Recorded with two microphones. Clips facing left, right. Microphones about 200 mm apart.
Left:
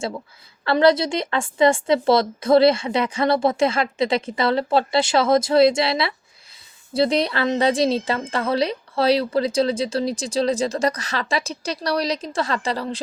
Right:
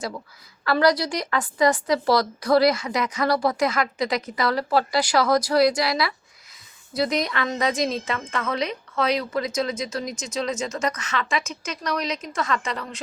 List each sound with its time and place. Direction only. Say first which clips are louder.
0.6 s a woman's voice: left 4 dB; 25° left (ahead or behind)